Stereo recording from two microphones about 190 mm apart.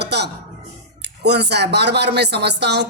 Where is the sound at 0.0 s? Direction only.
60° right (ahead or behind).